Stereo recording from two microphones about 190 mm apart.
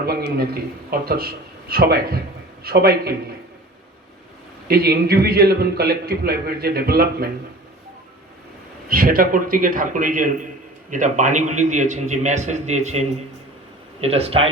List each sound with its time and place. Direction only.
0.0 s a sound: 55° right (ahead or behind)
0.3 s a man's voice: 55° right (ahead or behind)
4.7 s a man's voice: 55° right (ahead or behind)
8.9 s a man's voice: 50° right (ahead or behind); by 14.5 s 30° right (ahead or behind)